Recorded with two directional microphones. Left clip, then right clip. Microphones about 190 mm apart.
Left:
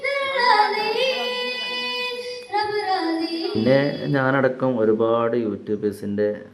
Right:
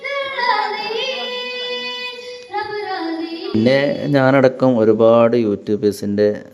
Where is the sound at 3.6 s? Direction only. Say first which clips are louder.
Right 4 dB; 35° right (ahead or behind).